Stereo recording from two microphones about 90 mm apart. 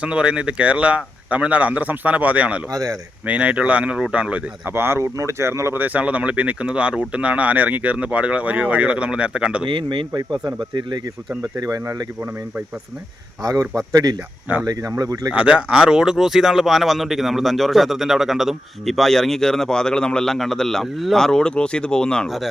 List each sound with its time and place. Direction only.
0.0 s speech: 10° right (ahead or behind)
4.7 s speech: 25° right (ahead or behind)
5.8 s speech: 15° right (ahead or behind)
9.6 s speech: 70° right (ahead or behind)
10.1 s speech: 50° right (ahead or behind)
11.5 s speech: 40° right (ahead or behind)
13.4 s speech: 35° right (ahead or behind)
15.3 s speech: 10° right (ahead or behind); by 22.4 s 5° left (ahead or behind)